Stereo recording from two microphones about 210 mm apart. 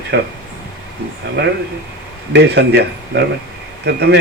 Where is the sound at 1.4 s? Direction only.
55° right (ahead or behind).